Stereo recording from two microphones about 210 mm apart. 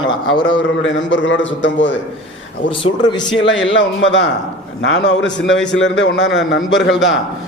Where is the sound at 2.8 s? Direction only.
20° left (ahead or behind).